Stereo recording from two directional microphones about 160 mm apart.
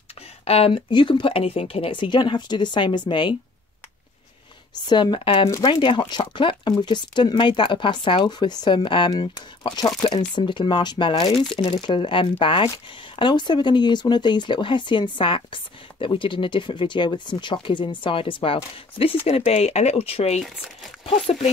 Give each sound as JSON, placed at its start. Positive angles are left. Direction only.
{"t": 0.5, "sound": "speech", "side_deg": 35}
{"t": 4.8, "sound": "speech", "side_deg": 30}